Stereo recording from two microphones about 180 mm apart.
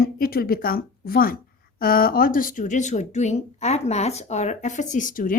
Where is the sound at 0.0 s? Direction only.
55° left (ahead or behind).